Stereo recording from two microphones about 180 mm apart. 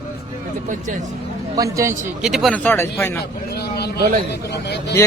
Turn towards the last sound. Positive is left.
turn(degrees=70)  # may be behind; listen again after turning